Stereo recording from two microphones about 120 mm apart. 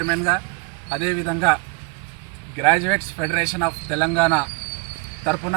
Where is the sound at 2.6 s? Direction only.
20° left (ahead or behind).